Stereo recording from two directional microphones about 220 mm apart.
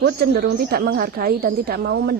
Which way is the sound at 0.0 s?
50° right (ahead or behind).